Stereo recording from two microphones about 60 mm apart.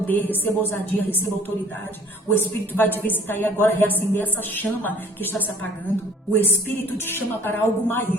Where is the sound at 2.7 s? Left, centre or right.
Left.